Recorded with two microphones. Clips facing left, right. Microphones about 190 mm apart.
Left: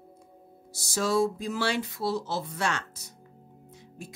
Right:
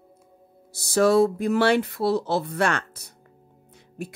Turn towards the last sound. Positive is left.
turn(degrees=-65)  # may be behind; listen again after turning